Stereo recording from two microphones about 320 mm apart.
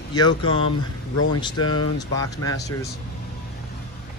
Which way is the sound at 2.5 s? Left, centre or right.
Centre.